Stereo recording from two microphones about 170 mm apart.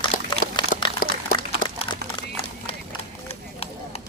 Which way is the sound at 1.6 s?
25° left (ahead or behind).